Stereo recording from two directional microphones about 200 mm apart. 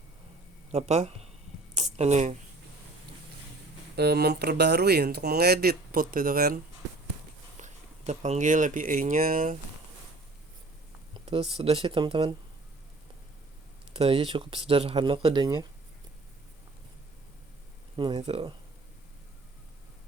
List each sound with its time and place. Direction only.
0.7 s speech: 35° right (ahead or behind)
1.7 s a sound: 35° right (ahead or behind)
3.9 s speech: 55° right (ahead or behind)
11.5 s speech: 30° right (ahead or behind)
13.9 s speech: 30° right (ahead or behind)
17.9 s speech: 25° right (ahead or behind)